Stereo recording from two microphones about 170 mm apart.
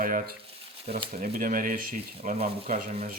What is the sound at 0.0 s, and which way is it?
Speech, 55° right (ahead or behind).